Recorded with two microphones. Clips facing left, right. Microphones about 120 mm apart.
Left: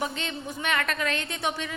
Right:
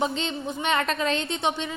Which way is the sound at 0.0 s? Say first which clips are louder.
Right 5 dB; 30° right (ahead or behind).